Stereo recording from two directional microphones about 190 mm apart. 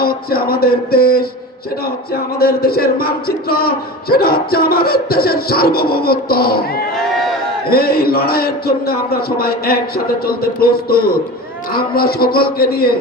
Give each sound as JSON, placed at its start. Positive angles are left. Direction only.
{"t": 0.0, "sound": "a man's voice", "side_deg": 50}
{"t": 2.4, "sound": "a man's voice", "side_deg": 55}
{"t": 7.0, "sound": "crowd", "side_deg": 0}
{"t": 7.7, "sound": "a man's voice", "side_deg": 50}